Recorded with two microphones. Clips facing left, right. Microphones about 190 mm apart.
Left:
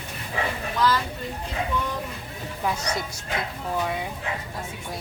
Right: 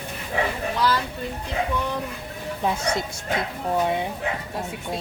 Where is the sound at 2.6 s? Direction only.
25° right (ahead or behind).